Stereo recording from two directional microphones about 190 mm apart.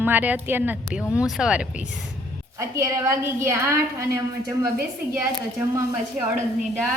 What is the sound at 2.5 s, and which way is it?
A woman's voice, 15° right (ahead or behind).